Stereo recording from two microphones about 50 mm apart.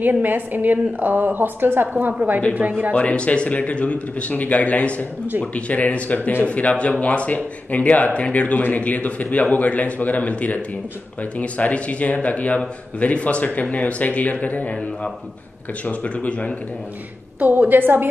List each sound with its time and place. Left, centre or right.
0.0 s a woman's voice: right
2.9 s speech: left
15.8 s speech: left
17.4 s a woman's voice: right